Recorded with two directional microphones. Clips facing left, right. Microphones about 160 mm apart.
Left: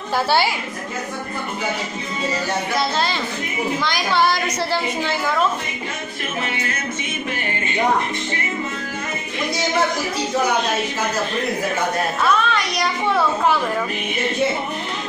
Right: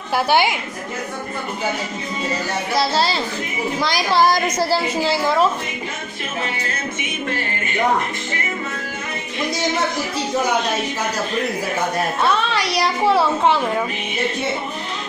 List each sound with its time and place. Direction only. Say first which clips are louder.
0.1 s a woman's voice: right 2 dB; 15° right (ahead or behind)
2.7 s a woman's voice: right 5 dB; 35° right (ahead or behind)
12.2 s a woman's voice: left 1 dB; 30° right (ahead or behind)